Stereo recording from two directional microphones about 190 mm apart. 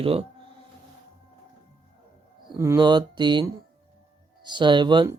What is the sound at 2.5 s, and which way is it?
Speech, 20° right (ahead or behind).